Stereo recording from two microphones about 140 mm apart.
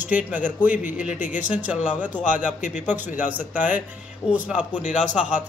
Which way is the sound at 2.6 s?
60° left (ahead or behind).